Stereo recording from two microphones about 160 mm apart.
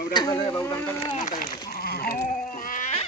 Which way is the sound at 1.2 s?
55° left (ahead or behind).